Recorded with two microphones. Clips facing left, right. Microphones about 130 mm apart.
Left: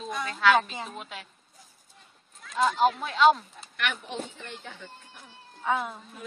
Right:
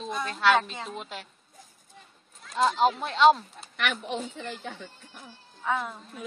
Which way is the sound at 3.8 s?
90° right.